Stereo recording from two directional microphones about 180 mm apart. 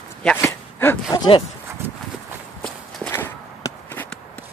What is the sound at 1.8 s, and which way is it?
Horse, 10° right (ahead or behind).